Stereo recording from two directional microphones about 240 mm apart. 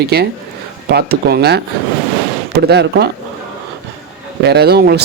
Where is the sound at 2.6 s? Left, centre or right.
Right.